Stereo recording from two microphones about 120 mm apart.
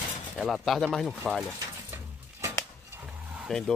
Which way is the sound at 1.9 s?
25° right (ahead or behind).